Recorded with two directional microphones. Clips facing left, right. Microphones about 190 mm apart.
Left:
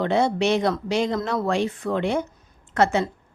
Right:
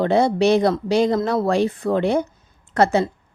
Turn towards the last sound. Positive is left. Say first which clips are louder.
# right 3 dB
turn(degrees=-35)  # may be behind; listen again after turning